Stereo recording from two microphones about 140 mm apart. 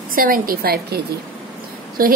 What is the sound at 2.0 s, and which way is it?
Speech, 90° right.